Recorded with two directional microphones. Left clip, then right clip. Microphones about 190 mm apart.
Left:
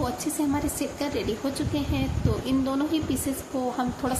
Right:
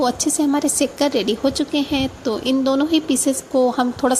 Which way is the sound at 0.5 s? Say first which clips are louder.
Right 9 dB; 45° right (ahead or behind).